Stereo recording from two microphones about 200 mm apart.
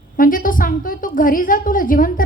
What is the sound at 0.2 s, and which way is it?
A woman's voice, 45° left (ahead or behind).